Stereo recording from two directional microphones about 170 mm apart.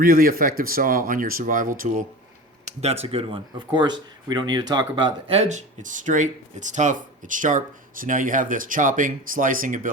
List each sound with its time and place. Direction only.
0.0 s speech: 55° right (ahead or behind)
2.6 s speech: 35° right (ahead or behind)
5.3 s speech: 40° right (ahead or behind)